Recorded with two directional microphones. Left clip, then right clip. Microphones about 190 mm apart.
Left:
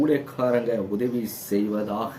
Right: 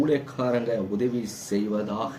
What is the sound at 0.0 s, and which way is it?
A man's voice, 5° left (ahead or behind).